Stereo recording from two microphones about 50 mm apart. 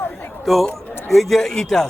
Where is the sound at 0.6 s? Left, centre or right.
Centre.